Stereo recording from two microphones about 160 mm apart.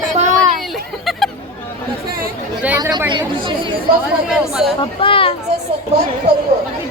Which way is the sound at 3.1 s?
30° right (ahead or behind).